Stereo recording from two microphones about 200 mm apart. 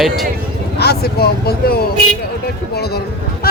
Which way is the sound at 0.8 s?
55° left (ahead or behind).